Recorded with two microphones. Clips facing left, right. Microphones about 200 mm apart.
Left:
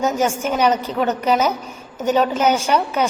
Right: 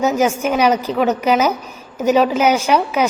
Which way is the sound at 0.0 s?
10° right (ahead or behind).